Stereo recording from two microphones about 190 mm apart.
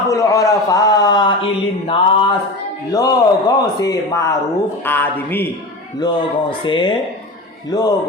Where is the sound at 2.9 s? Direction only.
20° left (ahead or behind).